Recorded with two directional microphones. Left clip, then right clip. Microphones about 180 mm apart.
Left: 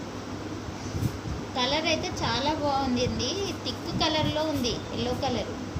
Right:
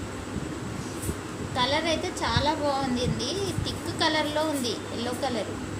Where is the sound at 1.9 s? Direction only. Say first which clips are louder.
Even; 15° left (ahead or behind).